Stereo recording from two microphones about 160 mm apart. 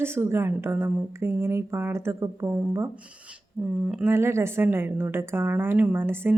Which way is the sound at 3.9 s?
5° right (ahead or behind).